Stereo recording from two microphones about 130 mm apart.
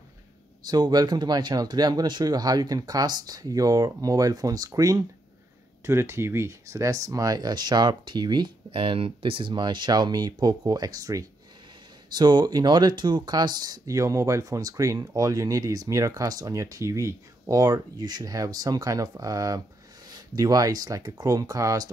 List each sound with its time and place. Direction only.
0.7 s speech: 30° right (ahead or behind)